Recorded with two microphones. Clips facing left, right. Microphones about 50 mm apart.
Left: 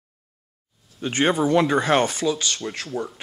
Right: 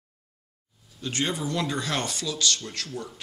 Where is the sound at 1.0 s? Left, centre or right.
Left.